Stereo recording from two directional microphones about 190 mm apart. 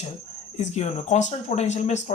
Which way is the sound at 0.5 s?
35° left (ahead or behind).